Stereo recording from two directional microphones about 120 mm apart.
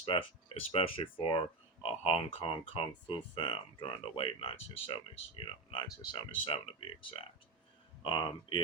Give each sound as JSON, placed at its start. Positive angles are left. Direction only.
{"t": 0.0, "sound": "speech", "side_deg": 45}
{"t": 8.0, "sound": "speech", "side_deg": 45}